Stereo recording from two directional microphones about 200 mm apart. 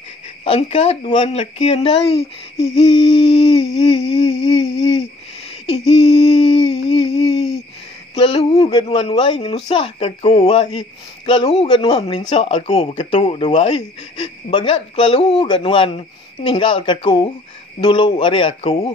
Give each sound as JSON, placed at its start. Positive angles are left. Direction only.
{"t": 0.4, "sound": "speech", "side_deg": 30}
{"t": 2.6, "sound": "humming", "side_deg": 30}
{"t": 5.7, "sound": "a sound", "side_deg": 30}
{"t": 8.8, "sound": "speech", "side_deg": 25}